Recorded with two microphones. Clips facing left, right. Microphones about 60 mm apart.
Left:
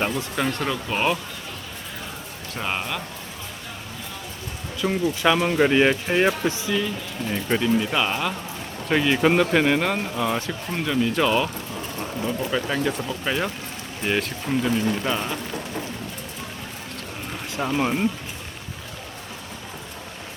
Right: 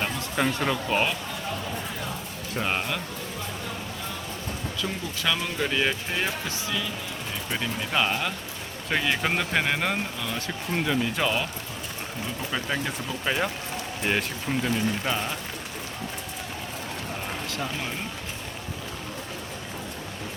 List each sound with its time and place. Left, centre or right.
0.3 s speech: centre
2.6 s speech: centre
4.8 s speech: left
7.6 s speech: centre
10.2 s speech: left
10.8 s speech: centre
12.5 s speech: centre
17.5 s speech: left